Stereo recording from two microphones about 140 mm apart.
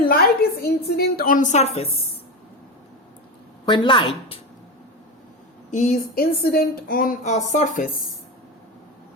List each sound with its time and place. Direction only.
0.1 s a woman's voice: 90° left; by 1.9 s 50° left (ahead or behind)
3.7 s a woman's voice: 35° left (ahead or behind)
5.7 s a woman's voice: 65° left (ahead or behind)